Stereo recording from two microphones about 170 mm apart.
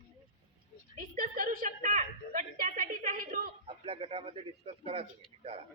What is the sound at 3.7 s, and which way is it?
A man's voice, 35° right (ahead or behind).